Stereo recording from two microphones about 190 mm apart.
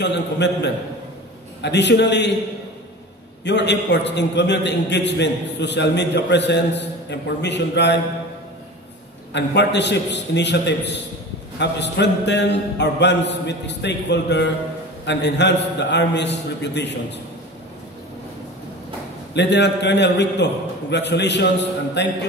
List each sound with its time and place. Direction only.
0.0 s a man's voice: 65° left (ahead or behind)
3.4 s a man's voice: 65° left (ahead or behind)
9.3 s a man's voice: 65° left (ahead or behind)
19.3 s a man's voice: 65° left (ahead or behind)